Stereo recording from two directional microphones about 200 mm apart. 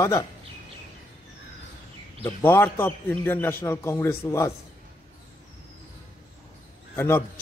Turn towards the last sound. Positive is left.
turn(degrees=10)  # may be behind; listen again after turning